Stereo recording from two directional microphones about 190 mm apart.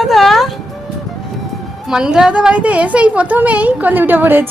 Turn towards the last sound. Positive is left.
turn(degrees=-10)  # may be behind; listen again after turning